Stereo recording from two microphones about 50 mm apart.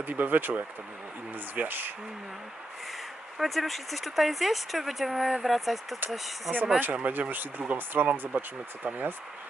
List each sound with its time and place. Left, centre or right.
0.0 s speech: right
3.3 s speech: centre
6.9 s speech: right